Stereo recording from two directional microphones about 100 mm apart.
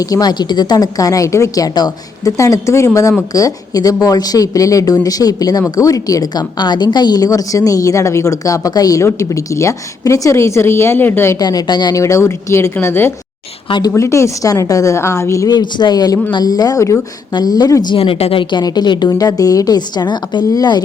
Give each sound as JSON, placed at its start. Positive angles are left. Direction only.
{"t": 0.0, "sound": "a woman's voice", "side_deg": 40}
{"t": 11.3, "sound": "a woman's voice", "side_deg": 40}
{"t": 11.9, "sound": "a woman's voice", "side_deg": 30}
{"t": 17.9, "sound": "speech", "side_deg": 70}
{"t": 18.5, "sound": "a woman's voice", "side_deg": 45}